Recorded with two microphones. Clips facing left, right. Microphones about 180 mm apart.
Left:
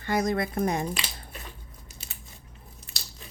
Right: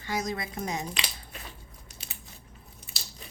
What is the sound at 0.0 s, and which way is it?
Speech, 55° left (ahead or behind).